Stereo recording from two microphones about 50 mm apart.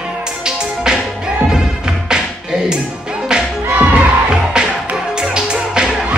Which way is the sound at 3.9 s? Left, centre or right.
Centre.